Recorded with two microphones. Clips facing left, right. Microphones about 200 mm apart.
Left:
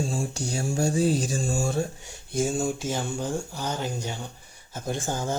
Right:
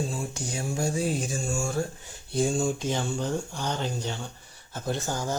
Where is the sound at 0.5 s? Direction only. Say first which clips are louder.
Left 4 dB; 40° left (ahead or behind).